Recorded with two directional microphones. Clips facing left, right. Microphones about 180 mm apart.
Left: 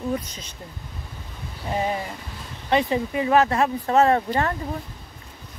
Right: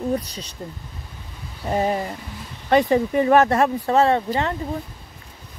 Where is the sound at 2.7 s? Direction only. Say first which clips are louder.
Right 5 dB; 45° right (ahead or behind).